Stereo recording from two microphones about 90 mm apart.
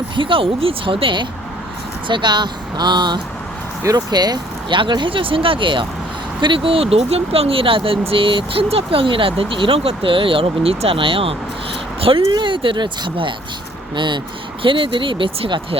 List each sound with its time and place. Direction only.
0.2 s speech: 75° right (ahead or behind); by 12.2 s 90° right
12.3 s speech: 65° right (ahead or behind)
14.6 s speech: 75° right (ahead or behind)